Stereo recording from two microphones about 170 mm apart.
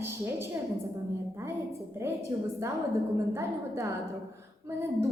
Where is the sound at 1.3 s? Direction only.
15° right (ahead or behind).